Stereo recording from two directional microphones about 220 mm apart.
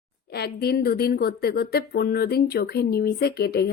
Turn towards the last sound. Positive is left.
turn(degrees=45)  # may be behind; listen again after turning